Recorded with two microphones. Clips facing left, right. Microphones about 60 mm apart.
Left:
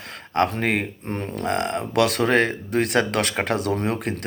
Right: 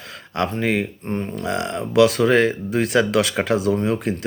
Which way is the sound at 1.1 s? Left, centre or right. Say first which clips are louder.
Right 4 dB; left.